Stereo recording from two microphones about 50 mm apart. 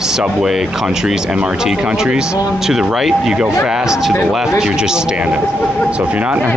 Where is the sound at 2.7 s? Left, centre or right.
Centre.